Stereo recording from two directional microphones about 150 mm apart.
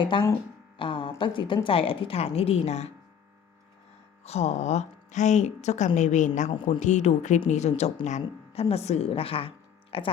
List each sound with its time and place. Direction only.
0.0 s speech: 30° left (ahead or behind)
0.8 s music: 35° left (ahead or behind)
1.2 s speech: 35° left (ahead or behind)
4.2 s speech: 45° left (ahead or behind)